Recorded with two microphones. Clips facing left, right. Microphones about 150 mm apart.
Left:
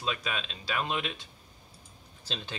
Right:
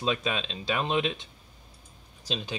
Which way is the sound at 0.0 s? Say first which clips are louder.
Right 5 dB; 25° right (ahead or behind).